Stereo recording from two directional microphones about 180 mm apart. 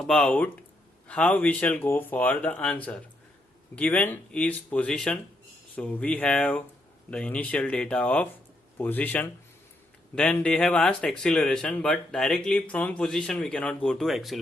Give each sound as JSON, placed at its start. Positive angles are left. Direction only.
{"t": 0.0, "sound": "speech", "side_deg": 5}